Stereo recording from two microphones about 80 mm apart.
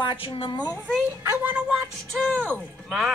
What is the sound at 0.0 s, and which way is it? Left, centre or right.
Speech, left.